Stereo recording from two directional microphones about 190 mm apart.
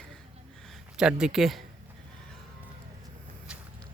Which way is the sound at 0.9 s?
5° right (ahead or behind).